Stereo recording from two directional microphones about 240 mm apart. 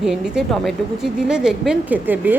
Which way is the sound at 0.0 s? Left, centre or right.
Centre.